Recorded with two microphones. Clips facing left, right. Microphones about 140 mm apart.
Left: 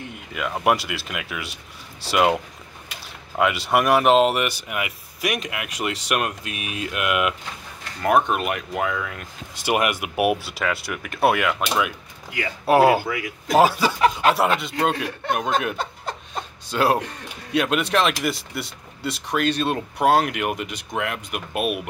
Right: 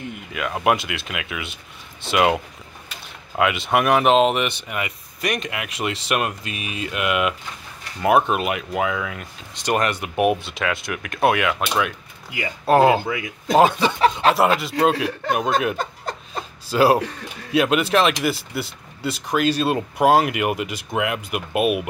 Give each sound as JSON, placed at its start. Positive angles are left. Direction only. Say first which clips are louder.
{"t": 0.3, "sound": "speech", "louder": "right 1 dB", "side_deg": 0}
{"t": 12.6, "sound": "speech", "louder": "right 1 dB", "side_deg": 10}
{"t": 13.0, "sound": "a man's voice", "louder": "right 1 dB", "side_deg": -25}
{"t": 13.6, "sound": "speech", "louder": "right 1 dB", "side_deg": 5}
{"t": 16.7, "sound": "speech", "louder": "right 4 dB", "side_deg": -5}